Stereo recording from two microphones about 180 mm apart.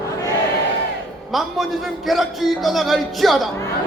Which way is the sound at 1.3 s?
Centre (ahead or behind).